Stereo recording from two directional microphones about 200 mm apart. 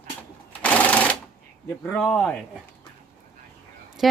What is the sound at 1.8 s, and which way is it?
Speech, 5° left (ahead or behind).